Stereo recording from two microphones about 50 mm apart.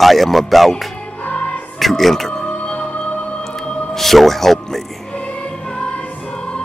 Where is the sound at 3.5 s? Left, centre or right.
Centre.